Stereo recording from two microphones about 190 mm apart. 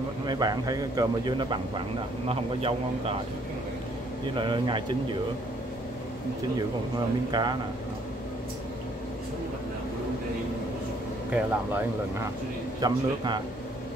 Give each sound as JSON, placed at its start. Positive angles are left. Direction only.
{"t": 0.3, "sound": "a man's voice", "side_deg": -20}
{"t": 4.4, "sound": "speech", "side_deg": -25}
{"t": 7.2, "sound": "speech", "side_deg": -25}
{"t": 11.3, "sound": "speech", "side_deg": -10}
{"t": 12.8, "sound": "speech", "side_deg": -25}